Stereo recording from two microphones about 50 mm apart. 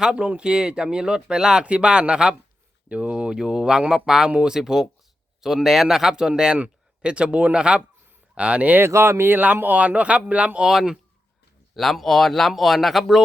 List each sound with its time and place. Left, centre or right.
0.0 s speech: right
4.3 s speech: right
4.5 s speech: centre; by 8.8 s right
8.8 s speech: right
9.6 s speech: right
10.7 s speech: centre